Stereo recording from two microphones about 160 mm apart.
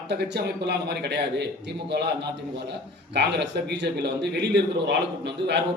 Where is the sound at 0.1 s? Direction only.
90° right.